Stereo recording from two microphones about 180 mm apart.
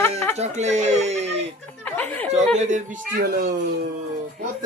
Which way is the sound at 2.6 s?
40° right (ahead or behind).